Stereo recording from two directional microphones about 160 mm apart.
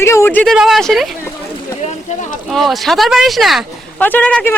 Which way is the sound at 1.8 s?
50° left (ahead or behind).